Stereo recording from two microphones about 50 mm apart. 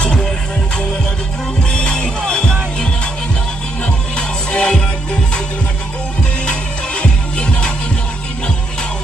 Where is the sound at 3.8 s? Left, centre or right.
Centre.